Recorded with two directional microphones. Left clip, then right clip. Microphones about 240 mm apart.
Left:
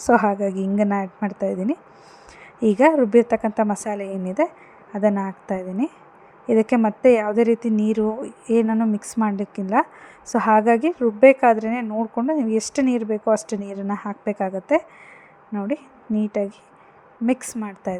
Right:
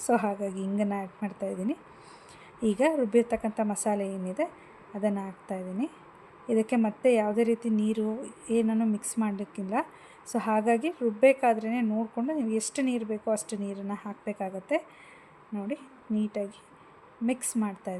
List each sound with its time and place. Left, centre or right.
0.0 s a woman's voice: left